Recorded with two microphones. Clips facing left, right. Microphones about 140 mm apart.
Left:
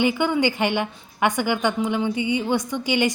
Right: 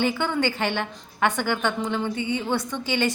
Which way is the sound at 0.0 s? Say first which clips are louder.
Left 3 dB; 15° left (ahead or behind).